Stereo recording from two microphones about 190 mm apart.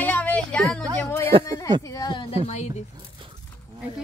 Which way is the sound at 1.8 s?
20° left (ahead or behind).